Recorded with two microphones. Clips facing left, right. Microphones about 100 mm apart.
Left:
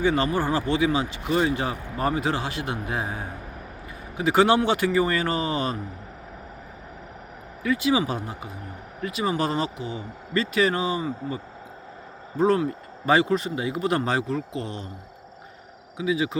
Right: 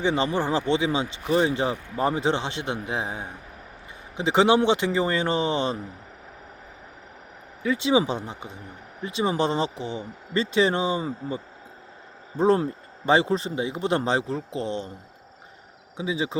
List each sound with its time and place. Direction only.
0.0 s speech: 20° right (ahead or behind)
7.6 s speech: 25° right (ahead or behind)
12.4 s speech: 30° right (ahead or behind)
16.0 s speech: 30° right (ahead or behind)